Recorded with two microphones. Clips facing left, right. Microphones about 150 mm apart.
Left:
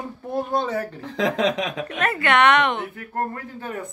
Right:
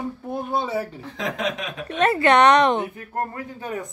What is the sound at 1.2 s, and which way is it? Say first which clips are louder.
Speech: left 6 dB; 90° left.